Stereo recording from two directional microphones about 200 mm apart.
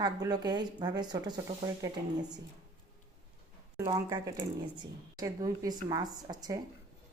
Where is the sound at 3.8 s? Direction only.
20° right (ahead or behind).